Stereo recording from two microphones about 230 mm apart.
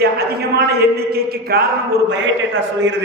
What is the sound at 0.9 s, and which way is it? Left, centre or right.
A man's voice, right.